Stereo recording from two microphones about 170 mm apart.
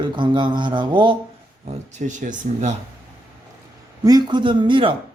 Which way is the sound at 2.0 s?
45° right (ahead or behind).